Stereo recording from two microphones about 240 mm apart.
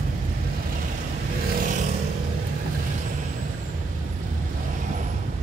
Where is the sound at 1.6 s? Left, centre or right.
Right.